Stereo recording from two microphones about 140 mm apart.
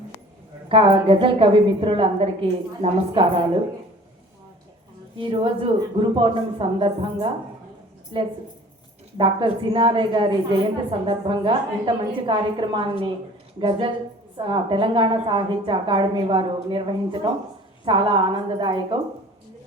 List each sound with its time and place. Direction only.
0.7 s a woman's voice: 40° right (ahead or behind)
5.1 s a woman's voice: 40° right (ahead or behind)
9.1 s a woman's voice: 35° right (ahead or behind)